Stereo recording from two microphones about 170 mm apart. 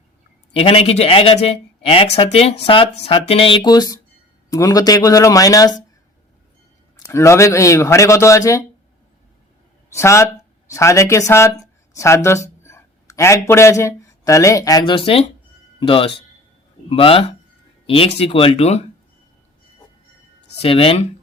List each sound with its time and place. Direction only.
0.5 s speech: 35° left (ahead or behind)
7.0 s a man's voice: 15° left (ahead or behind)
9.9 s a man's voice: 15° left (ahead or behind); by 18.9 s 40° left (ahead or behind)
20.6 s speech: 35° left (ahead or behind)